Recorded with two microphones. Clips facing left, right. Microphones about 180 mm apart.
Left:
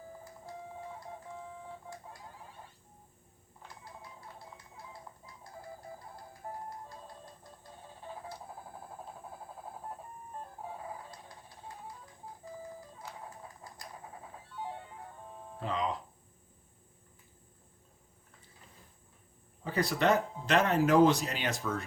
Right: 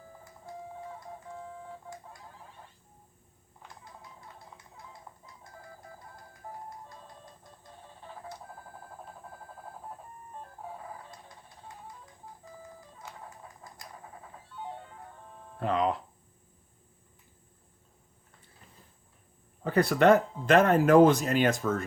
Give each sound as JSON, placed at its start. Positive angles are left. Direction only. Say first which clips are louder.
{"t": 15.6, "sound": "speech", "louder": "right 6 dB", "side_deg": -60}
{"t": 19.6, "sound": "speech", "louder": "right 7 dB", "side_deg": -55}